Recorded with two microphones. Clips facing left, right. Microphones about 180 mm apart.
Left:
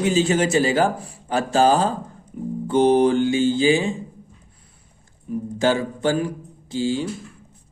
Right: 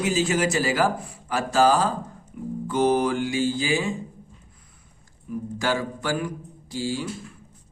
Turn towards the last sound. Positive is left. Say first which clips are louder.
# left 5 dB
turn(degrees=25)  # may be behind; listen again after turning